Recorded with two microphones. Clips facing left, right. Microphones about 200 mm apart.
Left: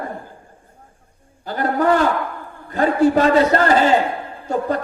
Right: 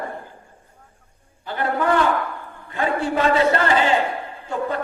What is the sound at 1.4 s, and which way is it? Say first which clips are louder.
A man's voice: left 4 dB; 40° left (ahead or behind).